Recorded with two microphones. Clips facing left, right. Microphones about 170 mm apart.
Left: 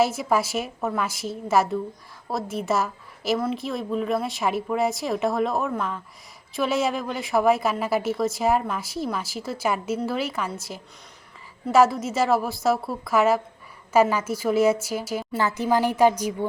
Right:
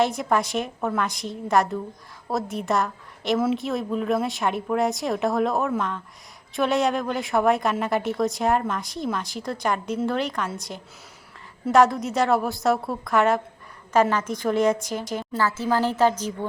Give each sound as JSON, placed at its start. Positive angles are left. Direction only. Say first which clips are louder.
{"t": 0.0, "sound": "a woman's voice", "louder": "even", "side_deg": 5}
{"t": 15.4, "sound": "a woman's voice", "louder": "left 1 dB", "side_deg": 15}